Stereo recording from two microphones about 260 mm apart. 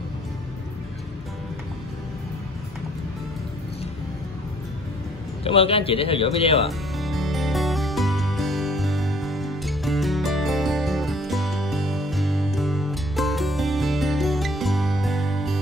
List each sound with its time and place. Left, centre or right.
5.4 s a man's voice: left
7.0 s music: centre